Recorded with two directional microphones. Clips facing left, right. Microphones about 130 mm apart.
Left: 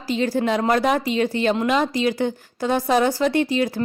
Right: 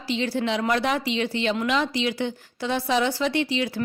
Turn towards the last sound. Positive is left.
turn(degrees=45)  # may be behind; listen again after turning